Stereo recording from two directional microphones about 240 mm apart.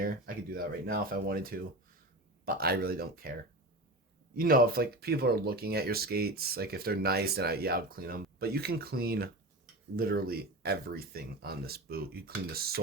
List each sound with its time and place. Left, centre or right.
0.0 s speech: right
4.4 s speech: right